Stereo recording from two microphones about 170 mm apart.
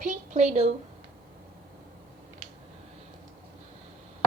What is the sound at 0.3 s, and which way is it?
Speech, 40° right (ahead or behind).